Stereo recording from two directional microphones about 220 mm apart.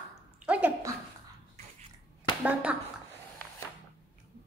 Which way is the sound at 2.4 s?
5° right (ahead or behind).